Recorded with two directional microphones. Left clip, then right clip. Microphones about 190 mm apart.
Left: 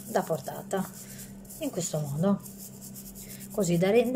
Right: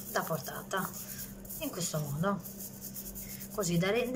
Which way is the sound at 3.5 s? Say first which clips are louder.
Left 7 dB; 20° left (ahead or behind).